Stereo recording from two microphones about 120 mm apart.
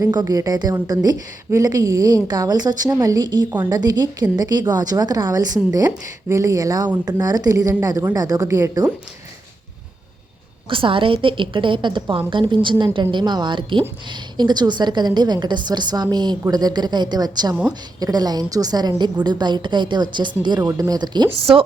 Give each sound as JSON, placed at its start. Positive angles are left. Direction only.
{"t": 0.0, "sound": "a woman's voice", "side_deg": -30}
{"t": 10.7, "sound": "a woman's voice", "side_deg": -45}
{"t": 20.6, "sound": "a woman's voice", "side_deg": -30}